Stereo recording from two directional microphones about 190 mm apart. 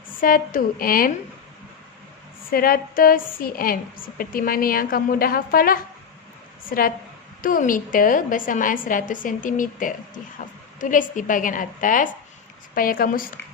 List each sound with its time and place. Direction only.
0.2 s a woman's voice: 50° left (ahead or behind)
2.5 s a woman's voice: 50° left (ahead or behind)